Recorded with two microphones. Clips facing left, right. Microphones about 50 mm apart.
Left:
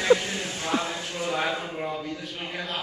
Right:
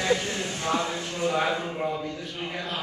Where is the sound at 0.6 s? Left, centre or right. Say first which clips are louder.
Right 1 dB; centre.